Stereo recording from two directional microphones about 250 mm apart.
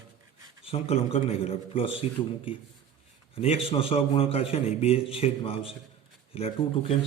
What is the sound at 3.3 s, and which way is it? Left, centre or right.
A man's voice, left.